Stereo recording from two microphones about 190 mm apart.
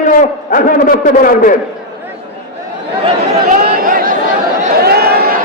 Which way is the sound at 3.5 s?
50° right (ahead or behind).